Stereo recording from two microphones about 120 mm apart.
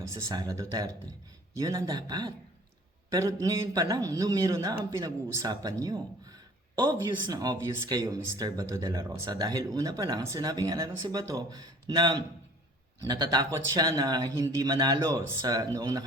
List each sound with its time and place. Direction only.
0.3 s speech: 30° right (ahead or behind)